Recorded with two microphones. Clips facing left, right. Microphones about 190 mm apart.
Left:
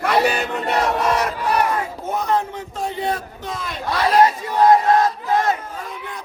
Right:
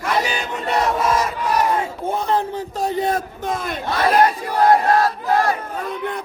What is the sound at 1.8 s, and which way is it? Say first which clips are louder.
A man's voice: right 1 dB; 30° right (ahead or behind).